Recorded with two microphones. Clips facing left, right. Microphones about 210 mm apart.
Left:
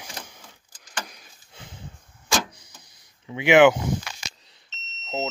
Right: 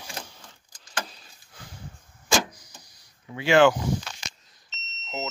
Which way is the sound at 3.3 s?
20° left (ahead or behind).